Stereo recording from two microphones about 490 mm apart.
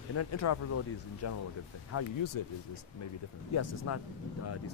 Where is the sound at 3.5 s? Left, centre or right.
Left.